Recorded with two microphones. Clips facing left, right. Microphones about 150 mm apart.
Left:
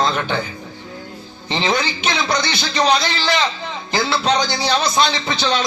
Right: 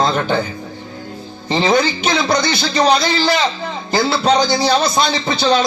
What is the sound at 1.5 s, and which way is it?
A man's voice, 40° right (ahead or behind).